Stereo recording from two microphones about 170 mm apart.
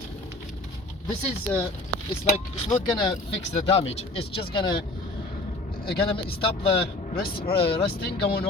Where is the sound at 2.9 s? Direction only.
25° left (ahead or behind).